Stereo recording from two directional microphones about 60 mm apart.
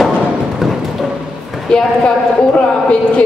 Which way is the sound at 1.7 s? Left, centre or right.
Centre.